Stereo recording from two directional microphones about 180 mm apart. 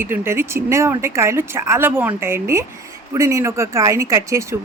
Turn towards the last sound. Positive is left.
turn(degrees=-15)  # may be behind; listen again after turning